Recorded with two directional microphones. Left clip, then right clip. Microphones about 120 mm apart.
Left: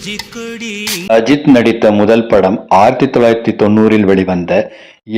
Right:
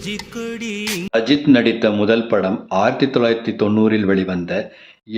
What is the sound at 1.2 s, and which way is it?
A man's voice, 45° left (ahead or behind).